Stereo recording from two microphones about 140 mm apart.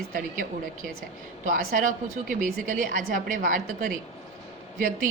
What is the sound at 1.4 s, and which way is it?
A woman's voice, 75° right (ahead or behind).